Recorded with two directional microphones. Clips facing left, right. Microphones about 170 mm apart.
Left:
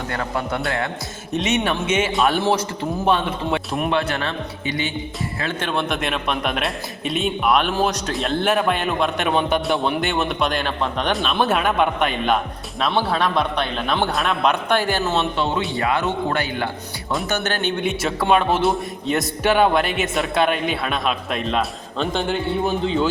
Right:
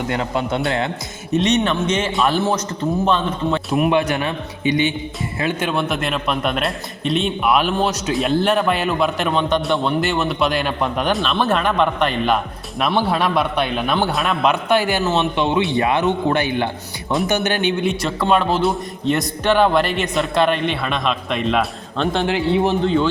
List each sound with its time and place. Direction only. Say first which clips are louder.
0.1 s a man's voice: right 2 dB; 20° right (ahead or behind)
1.3 s a man's voice: right 4 dB; 5° left (ahead or behind)
3.8 s a man's voice: right 3 dB; 15° right (ahead or behind)
12.8 s a man's voice: right 2 dB; 15° right (ahead or behind)
17.8 s a man's voice: right 1 dB; 5° left (ahead or behind)
22.3 s a man's voice: right 4 dB; 80° right
22.8 s a man's voice: right 3 dB; centre (ahead or behind)